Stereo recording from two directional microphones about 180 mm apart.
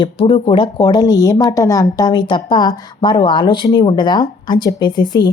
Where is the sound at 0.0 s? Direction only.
25° left (ahead or behind).